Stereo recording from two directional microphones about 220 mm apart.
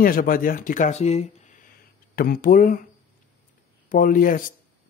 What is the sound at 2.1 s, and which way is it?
Speech, 40° left (ahead or behind).